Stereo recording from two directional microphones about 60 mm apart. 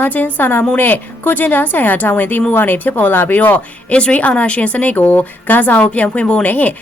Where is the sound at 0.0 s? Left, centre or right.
Left.